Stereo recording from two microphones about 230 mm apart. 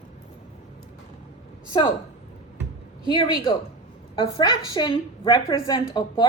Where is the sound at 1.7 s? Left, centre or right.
Centre.